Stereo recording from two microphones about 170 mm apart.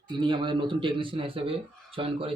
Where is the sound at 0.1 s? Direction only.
30° right (ahead or behind).